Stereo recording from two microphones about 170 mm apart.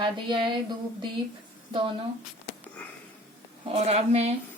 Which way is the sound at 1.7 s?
30° right (ahead or behind).